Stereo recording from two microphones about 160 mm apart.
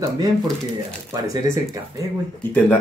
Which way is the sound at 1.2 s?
20° right (ahead or behind).